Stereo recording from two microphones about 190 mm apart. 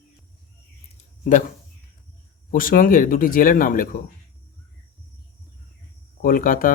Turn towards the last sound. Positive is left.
turn(degrees=45)  # may be behind; listen again after turning